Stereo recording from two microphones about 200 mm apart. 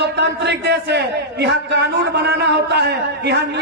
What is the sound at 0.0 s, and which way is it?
A man's voice, 60° right (ahead or behind).